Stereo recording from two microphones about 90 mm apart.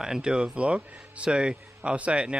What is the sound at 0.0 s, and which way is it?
Speech, 10° right (ahead or behind).